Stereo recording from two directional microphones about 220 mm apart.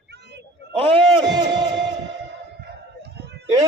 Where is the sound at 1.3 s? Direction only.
20° right (ahead or behind).